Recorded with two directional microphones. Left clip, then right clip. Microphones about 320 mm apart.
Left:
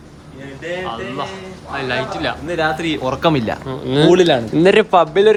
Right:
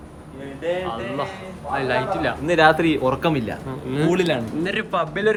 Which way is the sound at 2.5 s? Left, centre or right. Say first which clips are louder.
Right 5 dB; right.